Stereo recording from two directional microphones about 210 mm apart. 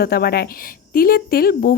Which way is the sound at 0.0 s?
50° left (ahead or behind).